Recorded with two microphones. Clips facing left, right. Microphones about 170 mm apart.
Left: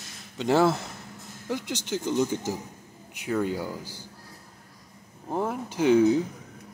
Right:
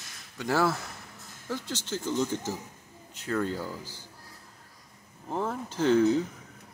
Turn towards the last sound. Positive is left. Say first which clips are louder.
# left 3 dB
turn(degrees=15)  # may be behind; listen again after turning